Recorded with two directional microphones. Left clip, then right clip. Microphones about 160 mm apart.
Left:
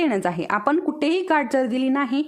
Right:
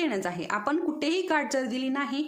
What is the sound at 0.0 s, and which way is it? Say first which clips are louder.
A woman's voice: left 7 dB; 50° left (ahead or behind).